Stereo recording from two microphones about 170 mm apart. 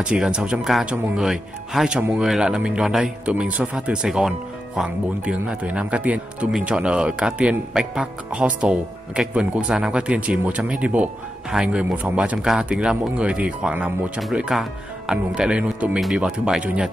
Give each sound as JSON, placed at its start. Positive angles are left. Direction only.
{"t": 0.0, "sound": "speech", "side_deg": -5}